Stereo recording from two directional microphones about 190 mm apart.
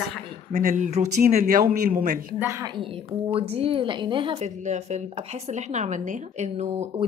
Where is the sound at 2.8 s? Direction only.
30° right (ahead or behind).